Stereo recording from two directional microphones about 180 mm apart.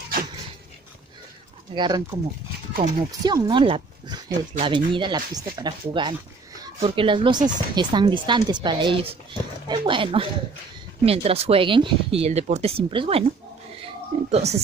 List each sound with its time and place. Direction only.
1.8 s speech: 25° right (ahead or behind)
2.8 s speech: 40° right (ahead or behind)
3.3 s speech: 25° right (ahead or behind)
13.8 s a sound: 35° right (ahead or behind)